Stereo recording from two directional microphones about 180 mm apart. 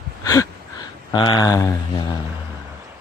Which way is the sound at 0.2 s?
20° left (ahead or behind).